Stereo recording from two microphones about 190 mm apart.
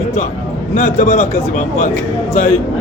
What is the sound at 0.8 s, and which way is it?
Speech, 40° left (ahead or behind).